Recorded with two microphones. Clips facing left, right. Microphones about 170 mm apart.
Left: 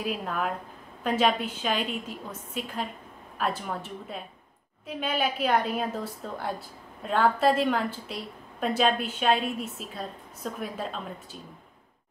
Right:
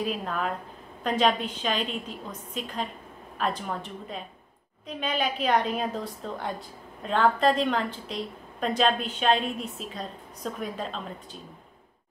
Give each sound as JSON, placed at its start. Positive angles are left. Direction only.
{"t": 0.0, "sound": "a woman's voice", "side_deg": 5}